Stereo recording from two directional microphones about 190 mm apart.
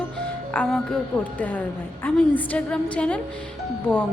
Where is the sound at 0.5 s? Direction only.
5° left (ahead or behind).